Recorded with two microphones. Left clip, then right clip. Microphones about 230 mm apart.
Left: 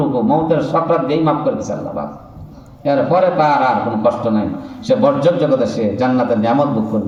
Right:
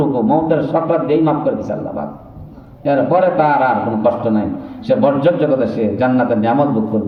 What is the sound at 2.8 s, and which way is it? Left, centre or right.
A man's voice, left.